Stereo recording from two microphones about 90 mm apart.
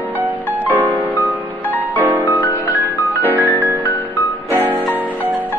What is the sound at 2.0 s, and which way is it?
Music, 20° right (ahead or behind).